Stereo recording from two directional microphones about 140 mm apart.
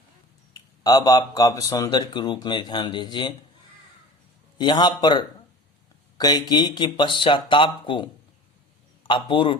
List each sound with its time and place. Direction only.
0.5 s speech: 30° left (ahead or behind)
4.5 s speech: 30° left (ahead or behind)